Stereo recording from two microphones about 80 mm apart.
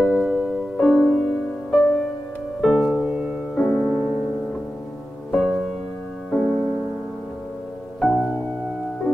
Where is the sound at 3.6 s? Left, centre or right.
Centre.